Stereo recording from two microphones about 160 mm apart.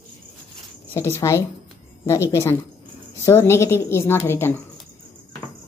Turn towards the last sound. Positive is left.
turn(degrees=15)  # may be behind; listen again after turning